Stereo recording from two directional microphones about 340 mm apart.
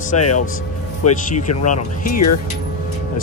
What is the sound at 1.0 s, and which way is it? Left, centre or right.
Speech, left.